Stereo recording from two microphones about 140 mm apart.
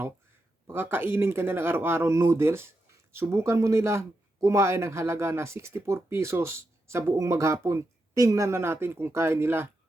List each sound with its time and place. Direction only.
0.7 s speech: 15° right (ahead or behind)